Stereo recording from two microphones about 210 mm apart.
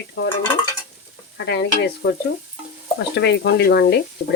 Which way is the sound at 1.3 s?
50° left (ahead or behind).